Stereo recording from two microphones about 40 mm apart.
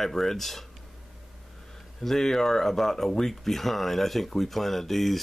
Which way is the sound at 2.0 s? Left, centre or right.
Centre.